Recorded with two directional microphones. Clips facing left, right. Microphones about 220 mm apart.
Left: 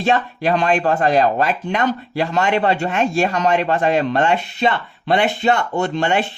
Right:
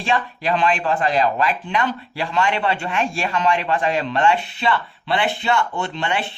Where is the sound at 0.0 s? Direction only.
45° left (ahead or behind).